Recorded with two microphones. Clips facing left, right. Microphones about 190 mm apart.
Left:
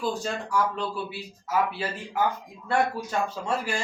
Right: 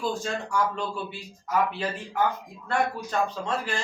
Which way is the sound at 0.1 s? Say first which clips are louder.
Left 1 dB; centre (ahead or behind).